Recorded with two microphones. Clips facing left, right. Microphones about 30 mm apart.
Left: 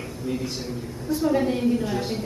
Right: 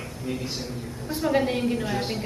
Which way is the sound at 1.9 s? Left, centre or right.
Right.